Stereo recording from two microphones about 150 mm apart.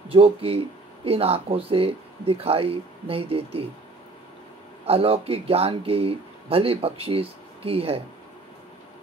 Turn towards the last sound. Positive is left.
turn(degrees=-40)  # may be behind; listen again after turning